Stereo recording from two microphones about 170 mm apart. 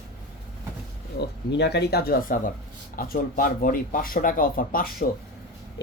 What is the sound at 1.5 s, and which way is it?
Speech, 80° left.